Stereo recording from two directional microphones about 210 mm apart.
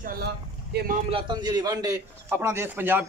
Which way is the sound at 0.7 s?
50° right (ahead or behind).